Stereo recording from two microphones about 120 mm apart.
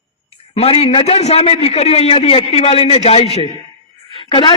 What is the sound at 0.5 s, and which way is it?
A man's voice, 55° left (ahead or behind).